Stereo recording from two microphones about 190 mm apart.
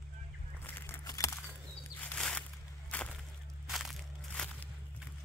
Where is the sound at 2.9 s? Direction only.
10° left (ahead or behind).